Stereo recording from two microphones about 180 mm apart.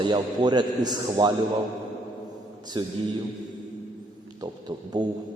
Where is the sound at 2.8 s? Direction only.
25° right (ahead or behind).